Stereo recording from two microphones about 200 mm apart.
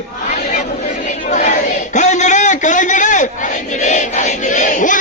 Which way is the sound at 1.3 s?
35° left (ahead or behind).